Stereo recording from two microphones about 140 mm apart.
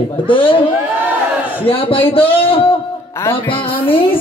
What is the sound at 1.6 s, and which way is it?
A man's voice, 40° left (ahead or behind).